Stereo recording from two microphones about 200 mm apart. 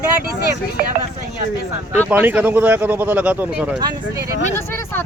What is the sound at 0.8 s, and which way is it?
Speech, 50° right (ahead or behind).